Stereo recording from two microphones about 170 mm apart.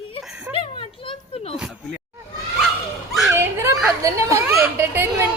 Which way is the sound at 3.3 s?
15° right (ahead or behind).